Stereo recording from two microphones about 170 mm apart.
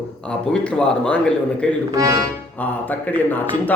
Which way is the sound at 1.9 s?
20° right (ahead or behind).